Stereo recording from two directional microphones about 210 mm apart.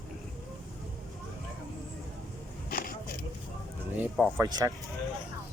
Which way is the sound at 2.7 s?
45° left (ahead or behind).